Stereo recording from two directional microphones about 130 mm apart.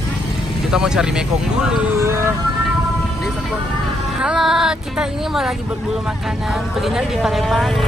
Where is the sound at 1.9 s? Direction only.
20° right (ahead or behind).